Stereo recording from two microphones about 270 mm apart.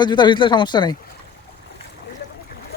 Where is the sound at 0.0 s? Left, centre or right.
Centre.